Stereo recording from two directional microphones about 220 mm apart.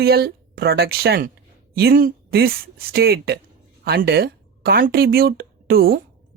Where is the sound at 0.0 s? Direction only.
45° right (ahead or behind).